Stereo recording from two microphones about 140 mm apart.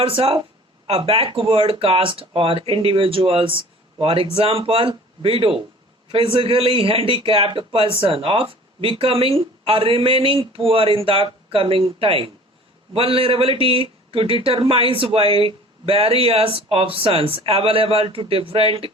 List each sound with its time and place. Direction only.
0.0 s a man's voice: 40° right (ahead or behind)